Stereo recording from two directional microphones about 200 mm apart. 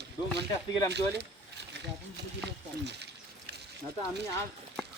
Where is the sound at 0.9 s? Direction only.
60° right (ahead or behind).